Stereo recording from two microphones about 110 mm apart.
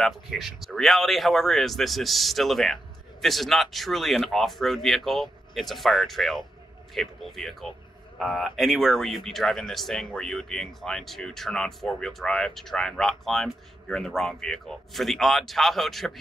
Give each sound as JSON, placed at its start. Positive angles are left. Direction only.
{"t": 0.0, "sound": "speech", "side_deg": 0}